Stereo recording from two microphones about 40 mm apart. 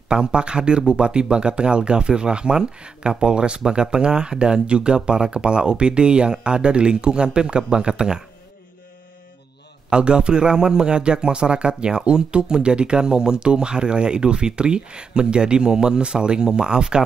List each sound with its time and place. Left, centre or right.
0.1 s speech: right
9.8 s speech: right